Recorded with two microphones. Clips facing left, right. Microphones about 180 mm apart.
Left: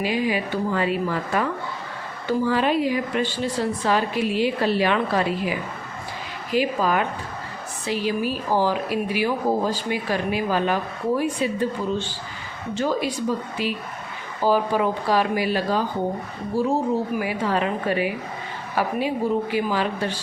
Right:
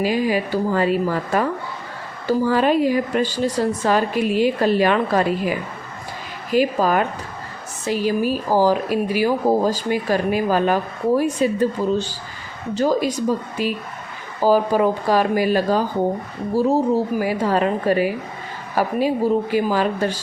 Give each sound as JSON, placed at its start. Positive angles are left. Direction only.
{"t": 0.0, "sound": "speech", "side_deg": -40}
{"t": 17.2, "sound": "speech", "side_deg": -40}